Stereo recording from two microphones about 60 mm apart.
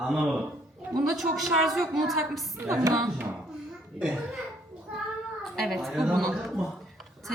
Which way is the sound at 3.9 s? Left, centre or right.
Centre.